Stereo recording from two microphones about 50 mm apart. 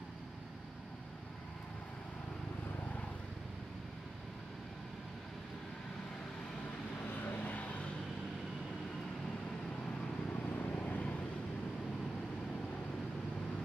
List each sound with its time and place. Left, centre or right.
7.2 s vehicle: left
10.6 s vehicle: left